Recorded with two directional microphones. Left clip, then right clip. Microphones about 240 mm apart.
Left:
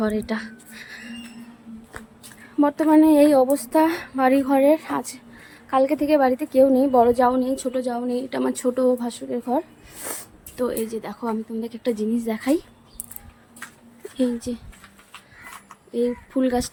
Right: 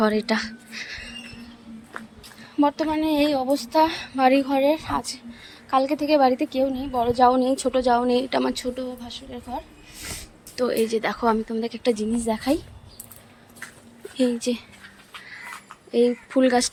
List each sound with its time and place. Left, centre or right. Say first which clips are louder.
0.0 s speech: right 4 dB; centre
2.6 s a woman's voice: left 5 dB; centre
10.1 s sniff: left 2 dB; centre
10.5 s a woman's voice: right 3 dB; centre
14.2 s speech: right 2 dB; centre
15.9 s speech: right 4 dB; centre